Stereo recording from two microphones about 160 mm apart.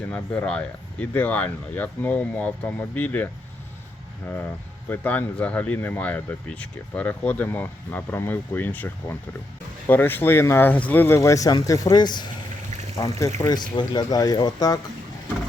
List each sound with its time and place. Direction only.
0.1 s speech: 5° left (ahead or behind)
4.9 s speech: 10° left (ahead or behind)